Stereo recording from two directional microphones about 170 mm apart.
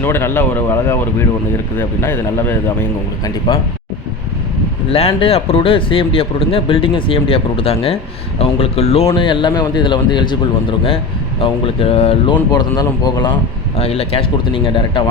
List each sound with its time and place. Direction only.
0.0 s a man's voice: 15° left (ahead or behind)
4.9 s a man's voice: 35° left (ahead or behind)